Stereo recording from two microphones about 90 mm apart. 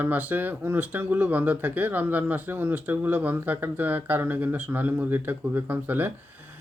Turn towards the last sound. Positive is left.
turn(degrees=-20)  # may be behind; listen again after turning